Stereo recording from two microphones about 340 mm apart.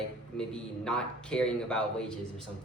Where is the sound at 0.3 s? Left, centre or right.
Centre.